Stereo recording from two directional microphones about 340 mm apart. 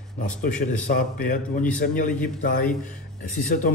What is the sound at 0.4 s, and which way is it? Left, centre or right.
A man's voice, left.